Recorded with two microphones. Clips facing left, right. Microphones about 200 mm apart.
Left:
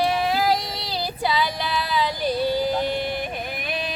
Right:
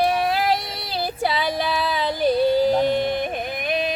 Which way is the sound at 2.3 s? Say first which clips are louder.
Right 6 dB; 25° right (ahead or behind).